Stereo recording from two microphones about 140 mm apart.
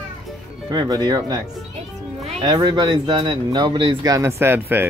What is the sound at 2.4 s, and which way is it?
Speech, 30° right (ahead or behind).